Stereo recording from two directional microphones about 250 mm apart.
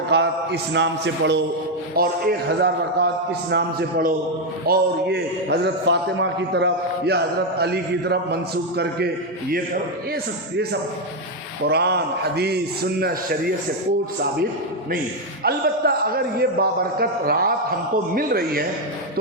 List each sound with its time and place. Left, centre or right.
0.1 s mantra: right
2.0 s a man's voice: right
11.6 s a man's voice: right
15.4 s a man's voice: right